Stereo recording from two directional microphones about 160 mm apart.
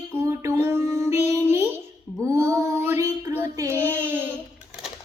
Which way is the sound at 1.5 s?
15° right (ahead or behind).